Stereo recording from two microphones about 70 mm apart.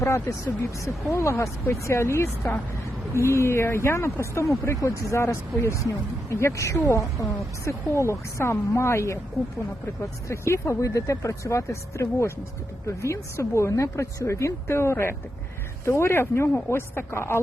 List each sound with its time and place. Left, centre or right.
0.0 s speech: left